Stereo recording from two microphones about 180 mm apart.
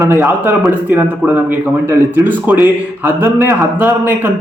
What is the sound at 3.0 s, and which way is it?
Speech, 10° right (ahead or behind).